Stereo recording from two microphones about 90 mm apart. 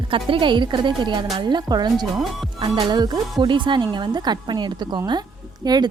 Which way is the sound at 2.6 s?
70° right (ahead or behind).